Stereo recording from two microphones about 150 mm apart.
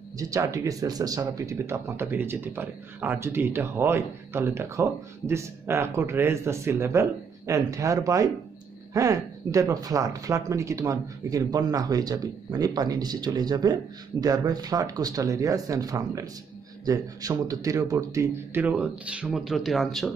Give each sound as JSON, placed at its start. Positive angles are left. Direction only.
{"t": 0.2, "sound": "speech", "side_deg": -20}